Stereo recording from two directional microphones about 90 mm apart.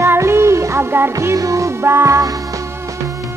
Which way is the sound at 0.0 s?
30° right (ahead or behind).